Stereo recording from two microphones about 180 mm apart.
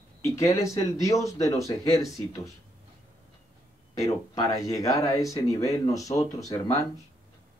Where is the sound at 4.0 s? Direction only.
20° left (ahead or behind).